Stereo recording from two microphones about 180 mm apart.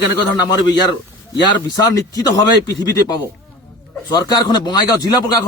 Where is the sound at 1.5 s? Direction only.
20° left (ahead or behind).